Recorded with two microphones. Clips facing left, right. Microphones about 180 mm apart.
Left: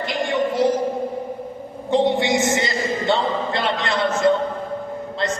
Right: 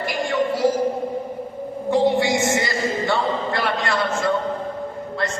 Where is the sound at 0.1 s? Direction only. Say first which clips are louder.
Even; 20° left (ahead or behind).